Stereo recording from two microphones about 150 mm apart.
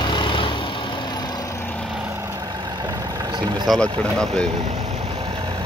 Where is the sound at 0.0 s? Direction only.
30° left (ahead or behind).